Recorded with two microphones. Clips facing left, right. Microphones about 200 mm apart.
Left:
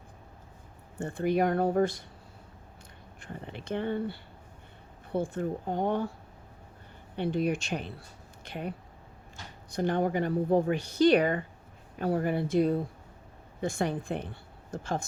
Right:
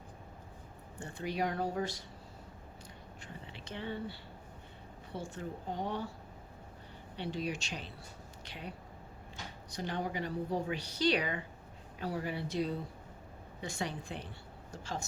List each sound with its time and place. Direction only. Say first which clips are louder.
1.0 s speech: left 9 dB; 55° left (ahead or behind)
3.2 s speech: left 11 dB; 55° left (ahead or behind)
7.2 s speech: left 9 dB; 55° left (ahead or behind)